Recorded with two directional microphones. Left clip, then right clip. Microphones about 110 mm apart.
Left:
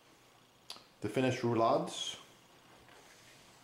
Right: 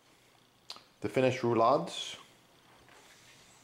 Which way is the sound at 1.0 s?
25° right (ahead or behind).